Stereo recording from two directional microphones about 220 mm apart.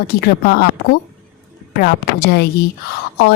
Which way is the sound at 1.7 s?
45° left (ahead or behind).